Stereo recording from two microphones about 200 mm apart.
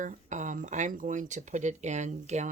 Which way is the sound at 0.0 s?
40° right (ahead or behind).